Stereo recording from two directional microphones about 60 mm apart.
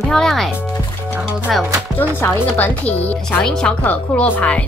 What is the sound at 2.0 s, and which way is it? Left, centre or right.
Speech, left.